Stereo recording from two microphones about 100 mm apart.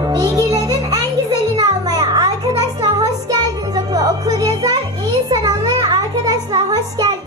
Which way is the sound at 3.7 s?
40° right (ahead or behind).